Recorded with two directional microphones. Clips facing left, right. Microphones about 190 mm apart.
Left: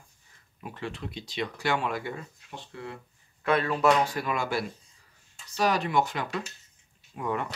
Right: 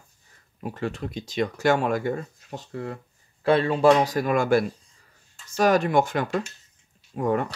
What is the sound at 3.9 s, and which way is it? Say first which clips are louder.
Speech: right 6 dB; 40° right (ahead or behind).